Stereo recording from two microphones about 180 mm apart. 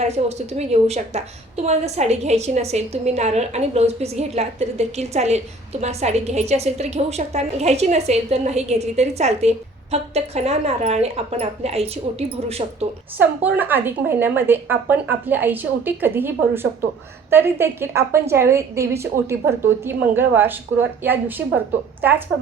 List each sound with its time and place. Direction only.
0.0 s a woman's voice: 35° right (ahead or behind)
13.1 s a woman's voice: 10° right (ahead or behind)
17.3 s a woman's voice: 15° right (ahead or behind)